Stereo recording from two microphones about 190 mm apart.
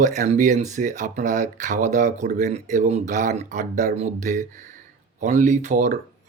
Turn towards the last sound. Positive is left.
turn(degrees=-40)  # may be behind; listen again after turning